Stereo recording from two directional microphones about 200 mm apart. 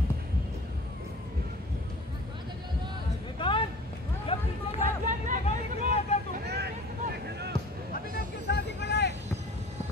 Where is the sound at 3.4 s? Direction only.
25° left (ahead or behind).